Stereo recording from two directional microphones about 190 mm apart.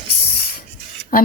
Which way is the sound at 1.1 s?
50° left (ahead or behind).